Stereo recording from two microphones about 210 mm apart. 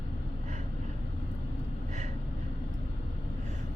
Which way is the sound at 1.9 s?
35° right (ahead or behind).